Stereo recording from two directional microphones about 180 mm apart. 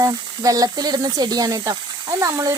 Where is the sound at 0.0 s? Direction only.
20° right (ahead or behind).